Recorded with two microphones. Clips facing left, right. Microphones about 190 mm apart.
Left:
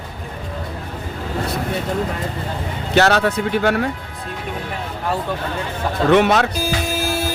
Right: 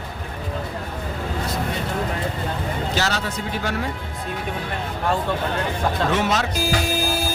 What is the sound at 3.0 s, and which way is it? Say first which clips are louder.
Speech: left 14 dB; 60° left (ahead or behind).